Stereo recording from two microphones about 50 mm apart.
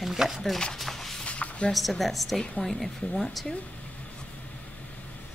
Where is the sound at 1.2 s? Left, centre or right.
Left.